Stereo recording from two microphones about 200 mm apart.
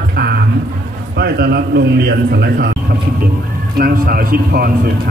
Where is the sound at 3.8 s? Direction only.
45° right (ahead or behind).